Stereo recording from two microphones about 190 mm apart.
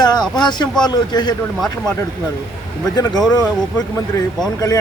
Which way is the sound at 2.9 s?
20° left (ahead or behind).